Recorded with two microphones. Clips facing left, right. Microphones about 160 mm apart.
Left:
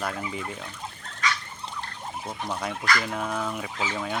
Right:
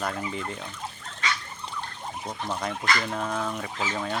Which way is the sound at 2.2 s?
5° left (ahead or behind).